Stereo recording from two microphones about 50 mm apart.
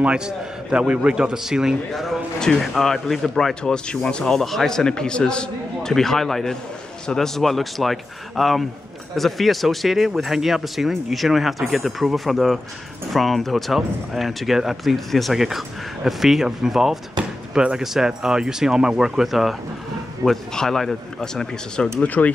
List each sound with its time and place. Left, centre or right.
0.0 s a man's voice: centre
2.0 s speech: centre
17.2 s speech: centre
20.2 s speech: centre
22.0 s speech: left